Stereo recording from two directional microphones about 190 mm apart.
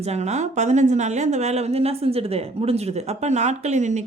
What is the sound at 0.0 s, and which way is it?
A woman's voice, 35° right (ahead or behind).